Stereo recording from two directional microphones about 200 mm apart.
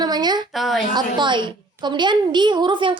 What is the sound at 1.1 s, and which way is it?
A woman's voice, 25° right (ahead or behind).